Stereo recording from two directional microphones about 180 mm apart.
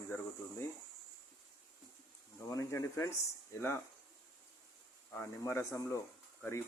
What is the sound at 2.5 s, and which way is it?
Speech, 15° left (ahead or behind).